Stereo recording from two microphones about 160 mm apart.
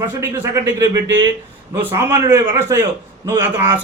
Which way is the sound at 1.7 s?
15° right (ahead or behind).